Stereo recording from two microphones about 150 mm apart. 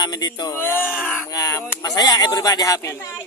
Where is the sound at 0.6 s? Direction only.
15° left (ahead or behind).